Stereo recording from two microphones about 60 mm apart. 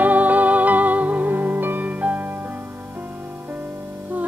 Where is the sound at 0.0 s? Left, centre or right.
Right.